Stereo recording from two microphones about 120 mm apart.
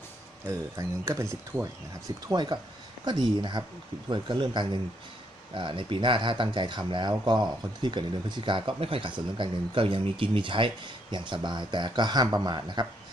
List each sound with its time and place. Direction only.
0.4 s speech: 25° right (ahead or behind)
2.0 s speech: 35° right (ahead or behind)